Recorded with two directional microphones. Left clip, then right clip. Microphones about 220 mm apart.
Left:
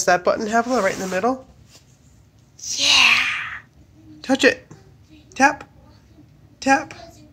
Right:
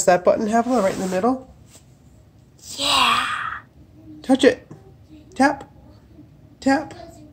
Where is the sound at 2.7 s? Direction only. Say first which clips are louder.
Left 3 dB; 35° right (ahead or behind).